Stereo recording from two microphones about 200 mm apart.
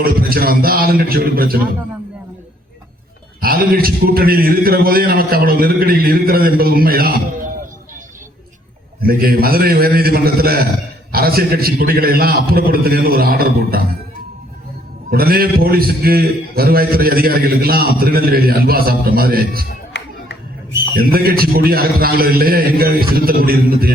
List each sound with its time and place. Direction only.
0.0 s a man's voice: 45° right (ahead or behind)
3.4 s a man's voice: 45° right (ahead or behind)
9.0 s a man's voice: 50° right (ahead or behind)
15.1 s a man's voice: 50° right (ahead or behind)
19.9 s a sound: 60° left (ahead or behind)
20.9 s a man's voice: 50° right (ahead or behind)